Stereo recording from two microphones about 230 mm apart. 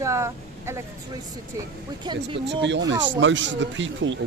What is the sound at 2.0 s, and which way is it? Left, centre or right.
Speech, centre.